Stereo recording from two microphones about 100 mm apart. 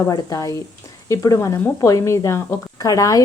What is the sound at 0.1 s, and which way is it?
A woman's voice, 40° left (ahead or behind).